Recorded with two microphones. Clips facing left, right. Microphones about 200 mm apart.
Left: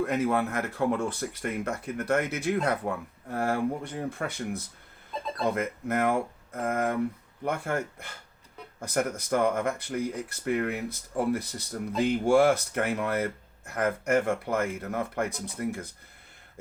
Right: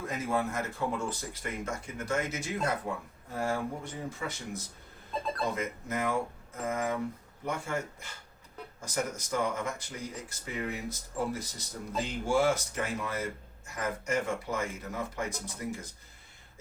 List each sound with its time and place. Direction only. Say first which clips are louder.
0.0 s speech: left 6 dB; 65° left (ahead or behind)